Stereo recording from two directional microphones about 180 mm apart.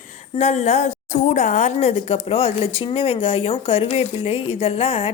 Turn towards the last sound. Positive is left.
turn(degrees=35)  # may be behind; listen again after turning